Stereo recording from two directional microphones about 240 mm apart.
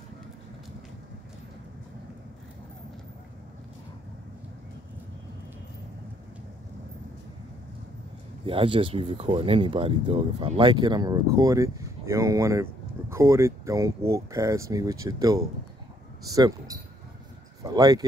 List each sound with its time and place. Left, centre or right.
8.5 s speech: right